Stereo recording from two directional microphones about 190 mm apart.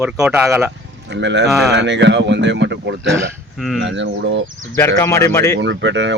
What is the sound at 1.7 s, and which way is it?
Speech, 65° right (ahead or behind).